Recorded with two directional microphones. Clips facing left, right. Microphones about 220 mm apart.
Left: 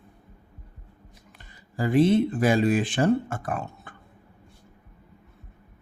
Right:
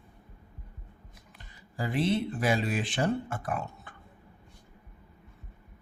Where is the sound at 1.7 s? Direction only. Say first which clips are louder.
Left 9 dB; 50° left (ahead or behind).